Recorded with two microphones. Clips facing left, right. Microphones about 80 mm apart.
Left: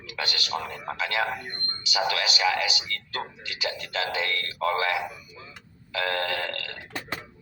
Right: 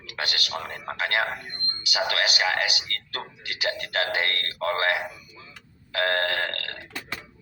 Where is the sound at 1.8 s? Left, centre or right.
Right.